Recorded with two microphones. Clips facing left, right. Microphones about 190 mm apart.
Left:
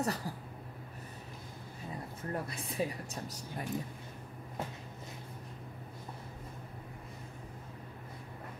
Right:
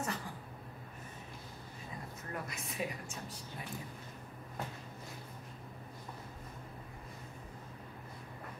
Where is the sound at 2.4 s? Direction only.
30° left (ahead or behind).